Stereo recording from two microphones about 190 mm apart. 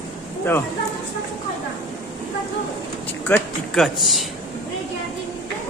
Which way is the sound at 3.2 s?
5° left (ahead or behind).